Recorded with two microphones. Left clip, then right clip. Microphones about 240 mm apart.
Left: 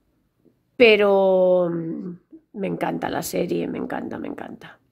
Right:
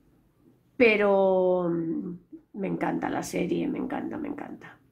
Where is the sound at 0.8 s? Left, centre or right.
Left.